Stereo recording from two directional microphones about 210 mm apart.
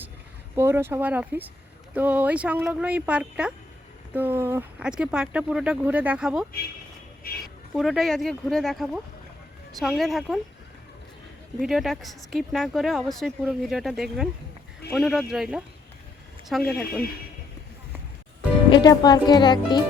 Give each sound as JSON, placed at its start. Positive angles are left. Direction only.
{"t": 0.5, "sound": "speech", "side_deg": -10}
{"t": 7.2, "sound": "a sound", "side_deg": 45}
{"t": 7.8, "sound": "speech", "side_deg": 0}
{"t": 11.6, "sound": "speech", "side_deg": 0}
{"t": 18.7, "sound": "speech", "side_deg": 20}